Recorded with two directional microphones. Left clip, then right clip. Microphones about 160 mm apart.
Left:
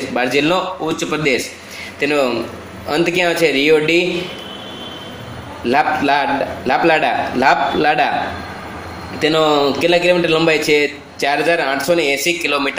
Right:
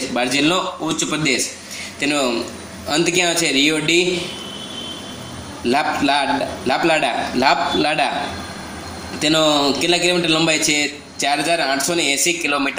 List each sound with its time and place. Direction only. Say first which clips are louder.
0.1 s a man's voice: left 3 dB; centre (ahead or behind)
5.7 s a man's voice: left 3 dB; 5° left (ahead or behind)
9.2 s a man's voice: left 2 dB; centre (ahead or behind)